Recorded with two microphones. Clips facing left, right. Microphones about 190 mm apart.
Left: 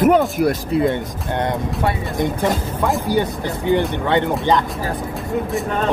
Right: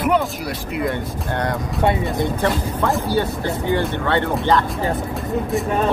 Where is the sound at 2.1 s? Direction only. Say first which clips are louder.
Left 1 dB; 15° left (ahead or behind).